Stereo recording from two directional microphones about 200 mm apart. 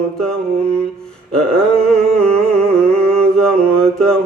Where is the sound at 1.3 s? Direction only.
5° left (ahead or behind).